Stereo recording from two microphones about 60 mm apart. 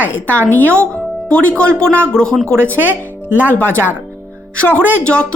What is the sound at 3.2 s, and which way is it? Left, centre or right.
Speech, right.